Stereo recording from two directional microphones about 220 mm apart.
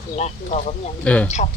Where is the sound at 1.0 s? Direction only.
5° left (ahead or behind).